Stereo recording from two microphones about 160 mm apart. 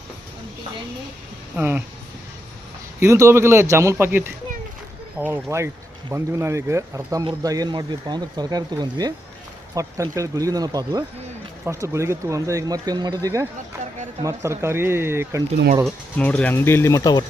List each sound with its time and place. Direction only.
1.5 s speech: 10° right (ahead or behind)
3.0 s speech: 20° right (ahead or behind)
15.8 s speech: 10° left (ahead or behind); by 17.2 s 25° left (ahead or behind)